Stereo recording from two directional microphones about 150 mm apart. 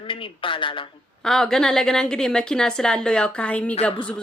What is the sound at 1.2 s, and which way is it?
A woman's voice, 5° left (ahead or behind).